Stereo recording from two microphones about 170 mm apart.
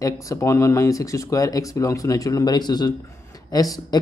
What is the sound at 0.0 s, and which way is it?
Speech, 15° left (ahead or behind).